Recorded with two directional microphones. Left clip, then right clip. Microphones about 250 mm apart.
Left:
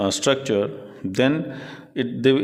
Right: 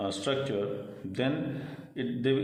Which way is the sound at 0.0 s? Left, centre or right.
Left.